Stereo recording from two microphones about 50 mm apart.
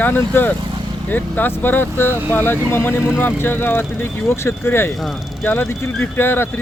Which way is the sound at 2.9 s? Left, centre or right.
Left.